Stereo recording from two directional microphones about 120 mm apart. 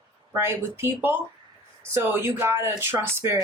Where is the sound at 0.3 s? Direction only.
20° right (ahead or behind).